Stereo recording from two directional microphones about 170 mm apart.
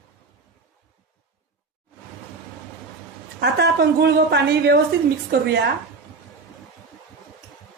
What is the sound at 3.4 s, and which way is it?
A woman's voice, 80° right.